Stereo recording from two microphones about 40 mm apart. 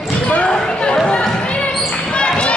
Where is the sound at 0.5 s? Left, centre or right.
Left.